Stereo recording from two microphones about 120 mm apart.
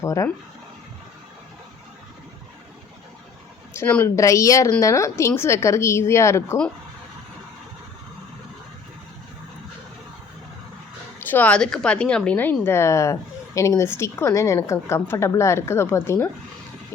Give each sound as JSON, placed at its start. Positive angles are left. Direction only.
{"t": 0.0, "sound": "a woman's voice", "side_deg": 25}
{"t": 3.8, "sound": "a woman's voice", "side_deg": 15}
{"t": 4.1, "sound": "a woman's voice", "side_deg": 25}
{"t": 11.3, "sound": "a woman's voice", "side_deg": 15}